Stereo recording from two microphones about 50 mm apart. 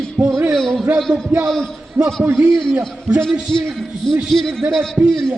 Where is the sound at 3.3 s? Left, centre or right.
Centre.